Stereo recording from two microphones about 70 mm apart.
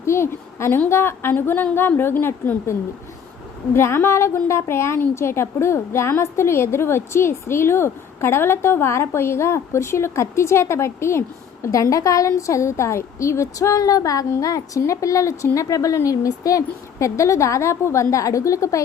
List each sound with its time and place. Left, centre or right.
0.0 s a woman's voice: left
3.8 s a woman's voice: left
11.6 s a woman's voice: left